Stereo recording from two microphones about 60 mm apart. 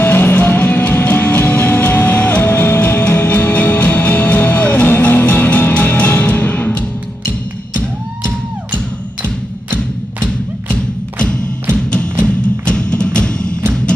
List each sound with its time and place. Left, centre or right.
0.0 s music: left
9.8 s music: centre